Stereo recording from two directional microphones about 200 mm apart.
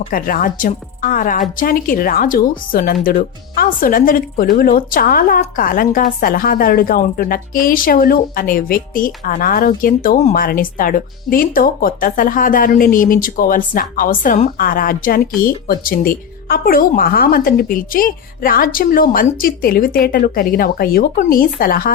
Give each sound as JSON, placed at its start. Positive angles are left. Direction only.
{"t": 0.1, "sound": "a woman's voice", "side_deg": 45}